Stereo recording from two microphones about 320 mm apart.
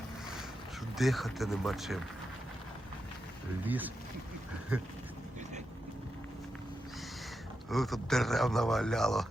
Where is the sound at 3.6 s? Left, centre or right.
Centre.